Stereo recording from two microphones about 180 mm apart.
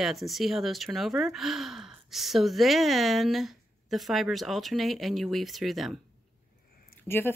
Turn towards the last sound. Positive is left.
turn(degrees=10)  # may be behind; listen again after turning